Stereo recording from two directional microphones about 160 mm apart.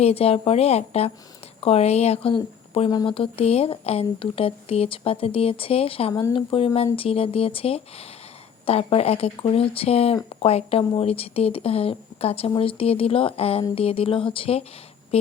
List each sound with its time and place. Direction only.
0.0 s speech: 40° left (ahead or behind)